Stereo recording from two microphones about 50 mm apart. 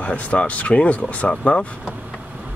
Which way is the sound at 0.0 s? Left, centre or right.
Left.